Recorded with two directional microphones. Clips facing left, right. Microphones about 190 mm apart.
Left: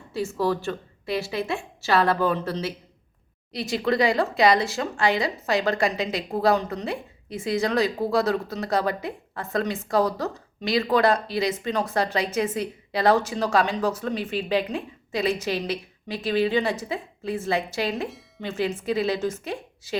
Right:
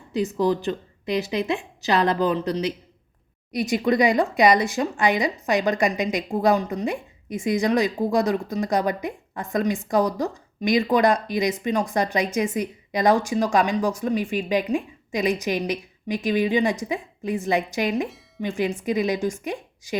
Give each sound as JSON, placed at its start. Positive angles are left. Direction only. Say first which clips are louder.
{"t": 0.1, "sound": "a woman's voice", "louder": "right 3 dB", "side_deg": -20}